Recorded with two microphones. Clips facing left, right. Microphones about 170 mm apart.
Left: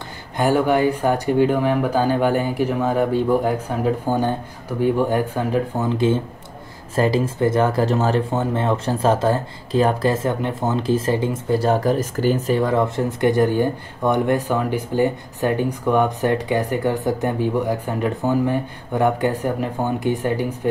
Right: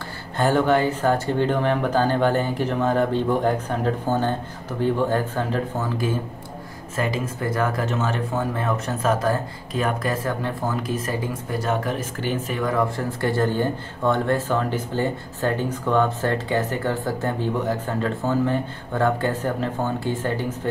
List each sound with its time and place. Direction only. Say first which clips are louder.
0.4 s speech: left 2 dB; 10° left (ahead or behind)